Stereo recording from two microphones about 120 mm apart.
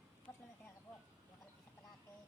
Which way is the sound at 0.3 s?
20° left (ahead or behind).